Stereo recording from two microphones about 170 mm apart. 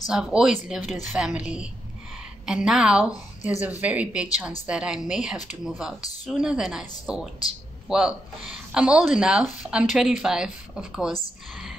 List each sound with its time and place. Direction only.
0.1 s speech: 5° right (ahead or behind)